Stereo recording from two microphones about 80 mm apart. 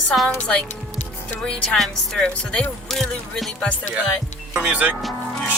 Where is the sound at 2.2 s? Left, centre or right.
Centre.